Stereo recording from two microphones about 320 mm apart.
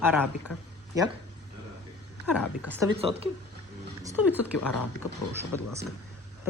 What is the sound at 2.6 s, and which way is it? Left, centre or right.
Speech, centre.